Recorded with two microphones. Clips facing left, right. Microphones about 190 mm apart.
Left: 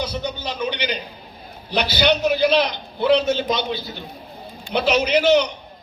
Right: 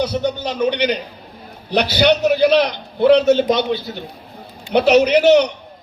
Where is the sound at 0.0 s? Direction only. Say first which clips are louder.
Right 7 dB; 65° right (ahead or behind).